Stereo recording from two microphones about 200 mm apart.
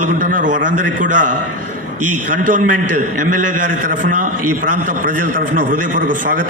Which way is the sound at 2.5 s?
40° right (ahead or behind).